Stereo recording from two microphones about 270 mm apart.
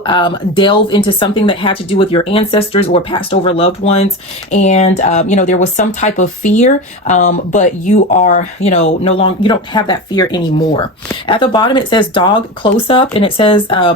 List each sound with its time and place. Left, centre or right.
0.0 s speech: centre